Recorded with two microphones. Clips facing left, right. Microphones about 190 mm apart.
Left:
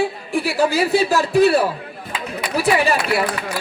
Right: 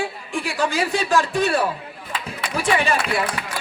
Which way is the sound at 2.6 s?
35° left (ahead or behind).